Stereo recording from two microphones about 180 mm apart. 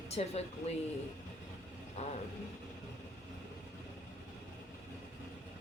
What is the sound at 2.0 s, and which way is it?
Speech, 40° left (ahead or behind).